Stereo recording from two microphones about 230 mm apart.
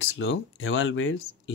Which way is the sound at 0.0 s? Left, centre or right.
Left.